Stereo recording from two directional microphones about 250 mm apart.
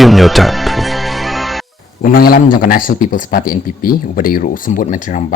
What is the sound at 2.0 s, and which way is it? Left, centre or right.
A man's voice, left.